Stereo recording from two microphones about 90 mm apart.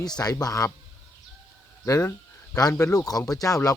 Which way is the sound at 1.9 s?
40° left (ahead or behind).